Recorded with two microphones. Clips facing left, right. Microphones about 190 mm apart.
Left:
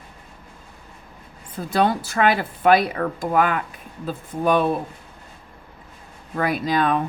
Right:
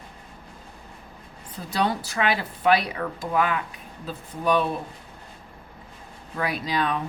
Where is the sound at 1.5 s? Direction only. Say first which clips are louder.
Left 5 dB; 50° left (ahead or behind).